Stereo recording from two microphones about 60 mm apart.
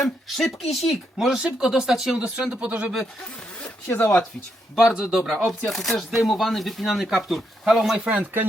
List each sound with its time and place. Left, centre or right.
0.0 s speech: centre
1.4 s speech: centre
2.1 s speech: centre
3.8 s speech: left
4.9 s speech: centre
5.5 s speech: centre
8.0 s speech: right